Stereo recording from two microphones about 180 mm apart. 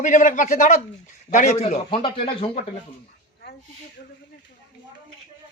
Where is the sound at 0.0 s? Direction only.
45° left (ahead or behind).